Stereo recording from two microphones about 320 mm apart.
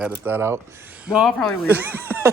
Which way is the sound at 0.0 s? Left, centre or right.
Centre.